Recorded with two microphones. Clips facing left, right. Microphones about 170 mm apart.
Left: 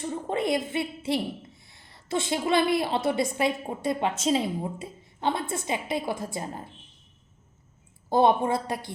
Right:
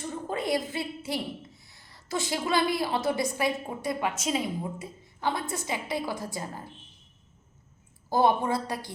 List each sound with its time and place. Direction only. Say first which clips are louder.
0.3 s a woman's voice: left 2 dB; 25° left (ahead or behind)
8.1 s a woman's voice: left 3 dB; 25° left (ahead or behind)